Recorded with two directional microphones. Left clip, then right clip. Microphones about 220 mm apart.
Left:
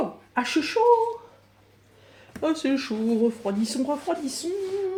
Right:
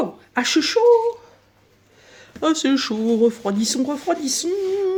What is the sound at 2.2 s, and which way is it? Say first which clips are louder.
Speech: right 6 dB; 40° right (ahead or behind).